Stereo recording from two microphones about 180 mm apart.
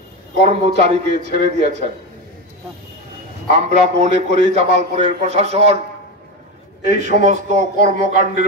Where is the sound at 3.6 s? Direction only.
40° right (ahead or behind).